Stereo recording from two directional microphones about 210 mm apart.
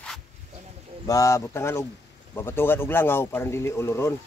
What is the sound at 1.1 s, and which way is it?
Speech, 15° left (ahead or behind).